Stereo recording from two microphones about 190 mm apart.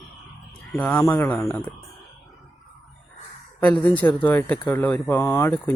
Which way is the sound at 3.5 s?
10° left (ahead or behind).